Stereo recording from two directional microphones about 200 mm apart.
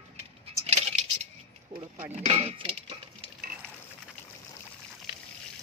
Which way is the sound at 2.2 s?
30° right (ahead or behind).